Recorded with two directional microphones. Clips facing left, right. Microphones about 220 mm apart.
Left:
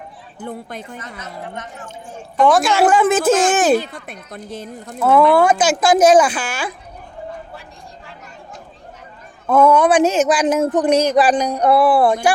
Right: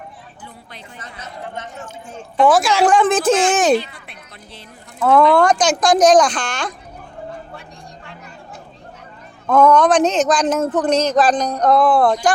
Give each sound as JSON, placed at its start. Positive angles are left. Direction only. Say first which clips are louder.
{"t": 0.4, "sound": "speech", "louder": "left 13 dB", "side_deg": 45}
{"t": 2.4, "sound": "speech", "louder": "even", "side_deg": 0}
{"t": 3.9, "sound": "speech", "louder": "left 8 dB", "side_deg": 45}
{"t": 4.9, "sound": "speech", "louder": "even", "side_deg": 5}
{"t": 9.5, "sound": "speech", "louder": "even", "side_deg": 10}